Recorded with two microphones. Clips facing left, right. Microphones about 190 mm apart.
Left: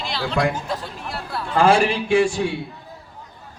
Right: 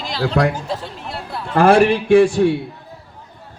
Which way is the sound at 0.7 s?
25° right (ahead or behind).